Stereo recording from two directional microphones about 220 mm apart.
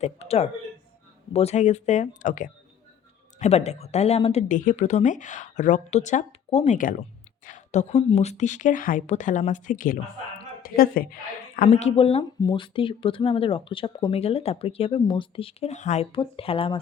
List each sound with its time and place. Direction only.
0.0 s a woman's voice: 30° left (ahead or behind)